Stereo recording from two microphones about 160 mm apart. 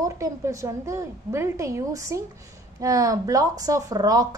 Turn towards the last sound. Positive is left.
turn(degrees=-20)  # may be behind; listen again after turning